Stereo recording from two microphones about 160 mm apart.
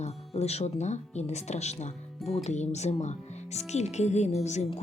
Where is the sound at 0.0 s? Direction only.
40° left (ahead or behind).